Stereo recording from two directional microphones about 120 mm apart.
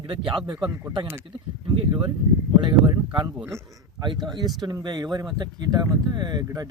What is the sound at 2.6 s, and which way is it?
Speech, 40° right (ahead or behind).